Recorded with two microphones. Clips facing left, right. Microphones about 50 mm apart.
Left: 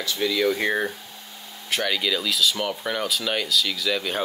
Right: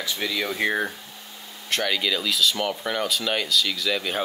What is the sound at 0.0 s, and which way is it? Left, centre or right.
Speech, centre.